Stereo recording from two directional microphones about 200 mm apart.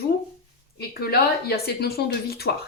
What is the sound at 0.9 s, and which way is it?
Speech, 50° left (ahead or behind).